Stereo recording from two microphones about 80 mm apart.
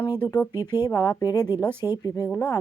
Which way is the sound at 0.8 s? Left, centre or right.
Left.